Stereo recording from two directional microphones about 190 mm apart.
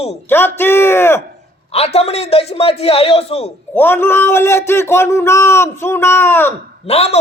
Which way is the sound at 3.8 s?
10° left (ahead or behind).